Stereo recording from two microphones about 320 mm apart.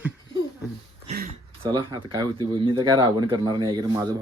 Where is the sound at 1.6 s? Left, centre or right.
Centre.